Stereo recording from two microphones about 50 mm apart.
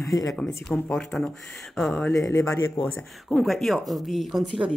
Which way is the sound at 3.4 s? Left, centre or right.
Centre.